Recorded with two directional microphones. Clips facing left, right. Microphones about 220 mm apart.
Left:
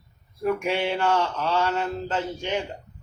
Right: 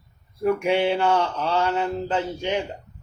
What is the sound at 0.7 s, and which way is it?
Mantra, 15° right (ahead or behind).